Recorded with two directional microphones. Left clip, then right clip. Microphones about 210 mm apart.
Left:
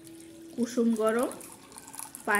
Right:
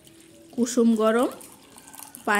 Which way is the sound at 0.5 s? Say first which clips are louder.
Right 6 dB; 55° right (ahead or behind).